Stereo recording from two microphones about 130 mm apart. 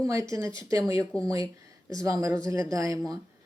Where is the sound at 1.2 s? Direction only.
25° right (ahead or behind).